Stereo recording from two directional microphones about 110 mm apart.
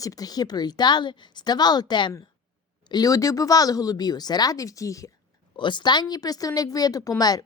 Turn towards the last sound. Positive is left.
turn(degrees=35)  # may be behind; listen again after turning